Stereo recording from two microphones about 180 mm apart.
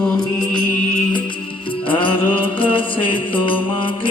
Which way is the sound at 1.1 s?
30° left (ahead or behind).